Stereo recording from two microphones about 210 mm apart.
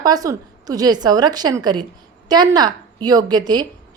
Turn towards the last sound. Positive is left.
turn(degrees=-20)  # may be behind; listen again after turning